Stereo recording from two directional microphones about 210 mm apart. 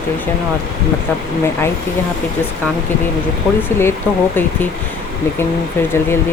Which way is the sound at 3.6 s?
10° left (ahead or behind).